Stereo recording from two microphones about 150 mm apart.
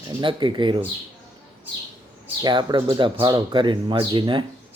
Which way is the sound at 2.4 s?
30° right (ahead or behind).